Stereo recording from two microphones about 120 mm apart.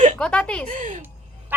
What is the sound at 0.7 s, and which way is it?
Speech, 90° right.